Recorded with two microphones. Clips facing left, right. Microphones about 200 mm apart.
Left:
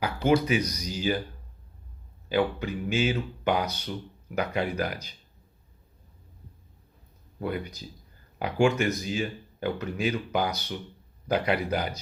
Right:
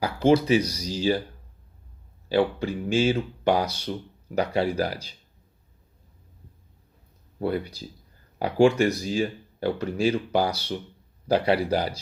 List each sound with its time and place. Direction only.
0.0 s speech: 30° right (ahead or behind)
2.3 s speech: 30° right (ahead or behind)
7.3 s speech: 35° right (ahead or behind)